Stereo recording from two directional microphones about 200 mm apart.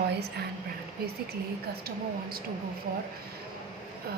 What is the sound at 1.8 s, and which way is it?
Speech, 50° right (ahead or behind).